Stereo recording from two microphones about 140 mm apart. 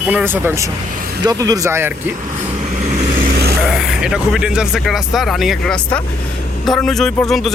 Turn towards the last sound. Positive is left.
turn(degrees=0)  # may be behind; listen again after turning